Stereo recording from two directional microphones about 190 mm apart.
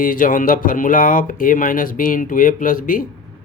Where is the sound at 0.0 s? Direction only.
45° left (ahead or behind).